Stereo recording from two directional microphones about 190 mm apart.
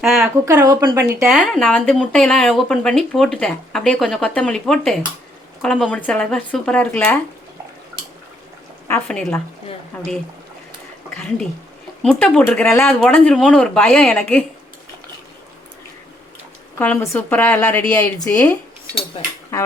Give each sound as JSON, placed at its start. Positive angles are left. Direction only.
{"t": 0.2, "sound": "speech", "side_deg": -15}
{"t": 1.3, "sound": "speech", "side_deg": 0}
{"t": 8.9, "sound": "speech", "side_deg": 10}
{"t": 11.1, "sound": "speech", "side_deg": 5}
{"t": 16.7, "sound": "speech", "side_deg": 10}
{"t": 19.5, "sound": "speech", "side_deg": 15}